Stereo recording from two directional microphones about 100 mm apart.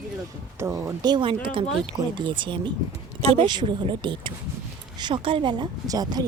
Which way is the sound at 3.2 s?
85° right.